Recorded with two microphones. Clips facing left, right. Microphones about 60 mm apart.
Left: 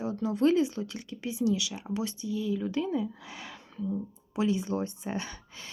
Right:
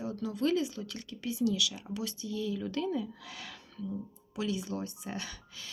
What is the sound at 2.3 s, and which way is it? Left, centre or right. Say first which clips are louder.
Speech: left 4 dB; centre.